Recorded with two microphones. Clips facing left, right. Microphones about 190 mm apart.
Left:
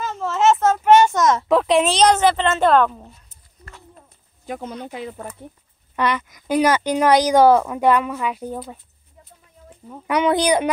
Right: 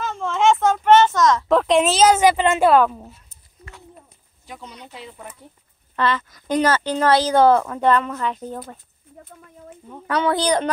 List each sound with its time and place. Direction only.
0.0 s a sound: 5° left (ahead or behind)
1.1 s a sound: 20° left (ahead or behind)
1.5 s a woman's voice: centre (ahead or behind)
3.6 s bird: 10° right (ahead or behind)
4.5 s speech: 50° left (ahead or behind)
5.9 s a woman's voice: 15° left (ahead or behind)
9.1 s speech: 60° right (ahead or behind)
9.8 s a woman's voice: 15° left (ahead or behind)